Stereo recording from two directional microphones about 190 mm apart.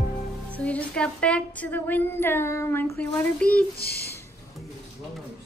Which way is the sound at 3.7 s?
55° left (ahead or behind).